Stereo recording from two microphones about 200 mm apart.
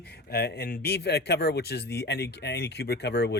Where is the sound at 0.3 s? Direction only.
50° left (ahead or behind).